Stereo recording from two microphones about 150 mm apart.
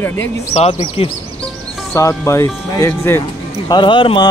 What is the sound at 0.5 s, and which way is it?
Speech, 40° left (ahead or behind).